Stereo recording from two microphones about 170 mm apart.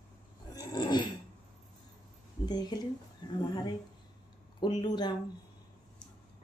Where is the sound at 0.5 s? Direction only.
25° left (ahead or behind).